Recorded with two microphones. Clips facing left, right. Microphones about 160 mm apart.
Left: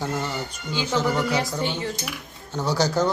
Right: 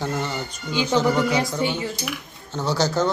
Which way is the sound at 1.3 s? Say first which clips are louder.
Right 2 dB; 10° right (ahead or behind).